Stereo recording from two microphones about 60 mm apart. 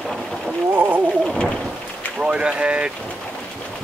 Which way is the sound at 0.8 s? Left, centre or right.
Right.